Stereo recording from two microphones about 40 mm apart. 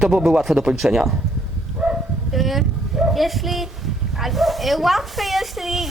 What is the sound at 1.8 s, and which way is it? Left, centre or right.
Bow-wow, right.